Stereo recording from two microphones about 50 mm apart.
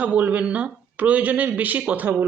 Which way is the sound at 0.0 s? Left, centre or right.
Right.